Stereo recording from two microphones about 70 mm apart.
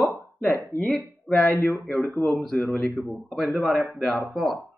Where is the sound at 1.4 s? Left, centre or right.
Left.